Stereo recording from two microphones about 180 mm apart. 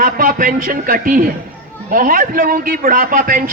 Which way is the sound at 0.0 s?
50° right (ahead or behind).